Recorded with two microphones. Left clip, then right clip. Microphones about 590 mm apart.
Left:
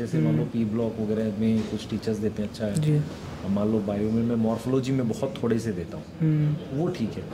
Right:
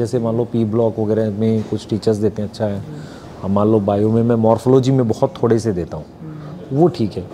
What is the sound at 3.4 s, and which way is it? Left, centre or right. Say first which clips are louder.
Speech: right 12 dB; right.